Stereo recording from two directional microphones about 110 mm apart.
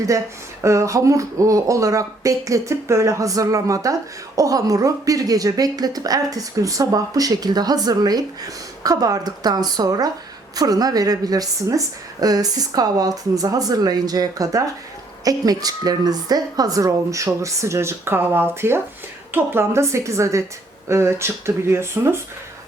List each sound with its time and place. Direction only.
0.6 s a woman's voice: 30° right (ahead or behind)